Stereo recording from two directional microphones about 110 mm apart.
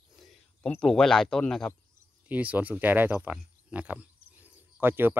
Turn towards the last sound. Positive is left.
turn(degrees=-20)  # may be behind; listen again after turning